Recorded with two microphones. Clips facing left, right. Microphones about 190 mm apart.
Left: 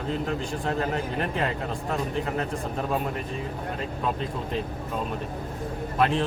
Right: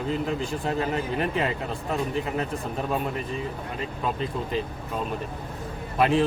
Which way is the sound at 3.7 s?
Centre (ahead or behind).